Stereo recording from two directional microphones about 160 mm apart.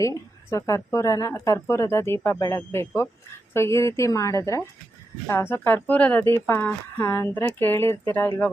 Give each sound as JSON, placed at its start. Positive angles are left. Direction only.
{"t": 0.0, "sound": "a woman's voice", "side_deg": 20}